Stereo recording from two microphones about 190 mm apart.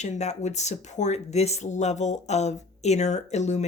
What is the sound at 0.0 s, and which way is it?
Speech, 35° left (ahead or behind).